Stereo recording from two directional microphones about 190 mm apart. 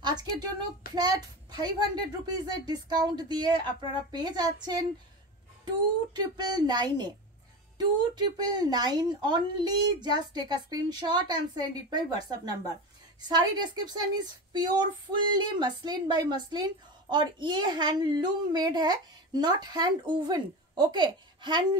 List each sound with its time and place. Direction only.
0.0 s a sound: 20° right (ahead or behind)
0.9 s a child's voice: 20° right (ahead or behind)
6.3 s speech: 20° right (ahead or behind)